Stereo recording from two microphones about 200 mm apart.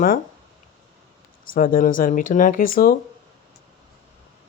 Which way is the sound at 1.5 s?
45° left (ahead or behind).